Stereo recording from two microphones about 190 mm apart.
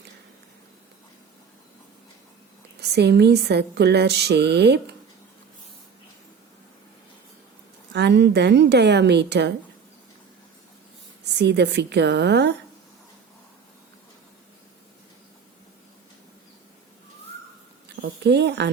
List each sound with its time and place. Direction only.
2.9 s speech: 60° right (ahead or behind)
7.9 s speech: 65° right (ahead or behind)
11.3 s speech: 60° right (ahead or behind)
18.0 s speech: 60° right (ahead or behind)